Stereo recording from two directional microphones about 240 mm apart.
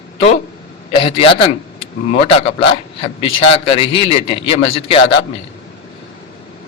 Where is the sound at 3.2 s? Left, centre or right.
Left.